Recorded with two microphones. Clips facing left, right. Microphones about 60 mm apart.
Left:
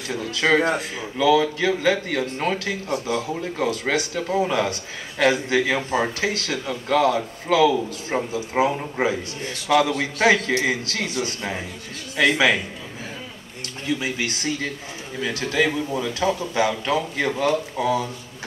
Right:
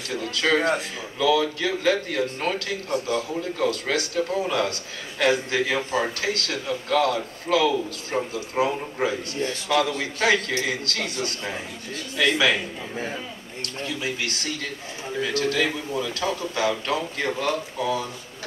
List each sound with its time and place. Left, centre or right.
0.2 s a man's voice: centre
14.0 s a man's voice: centre